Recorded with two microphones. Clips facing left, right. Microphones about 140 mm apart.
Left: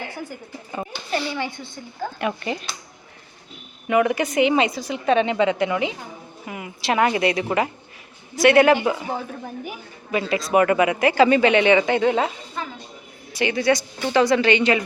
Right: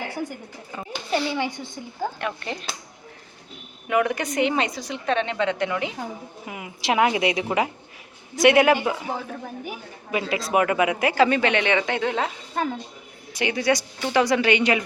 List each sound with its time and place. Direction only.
1.3 s speech: 15° right (ahead or behind)
2.2 s speech: 10° left (ahead or behind)
3.8 s speech: centre (ahead or behind)
6.4 s a woman's voice: 10° right (ahead or behind)
8.8 s speech: centre (ahead or behind)
12.6 s speech: 55° right (ahead or behind)
13.3 s speech: 10° right (ahead or behind)